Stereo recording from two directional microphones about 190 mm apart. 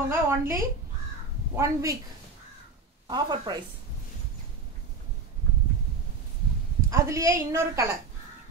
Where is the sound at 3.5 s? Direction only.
25° right (ahead or behind).